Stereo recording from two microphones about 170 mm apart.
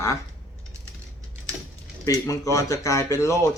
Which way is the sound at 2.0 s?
20° left (ahead or behind).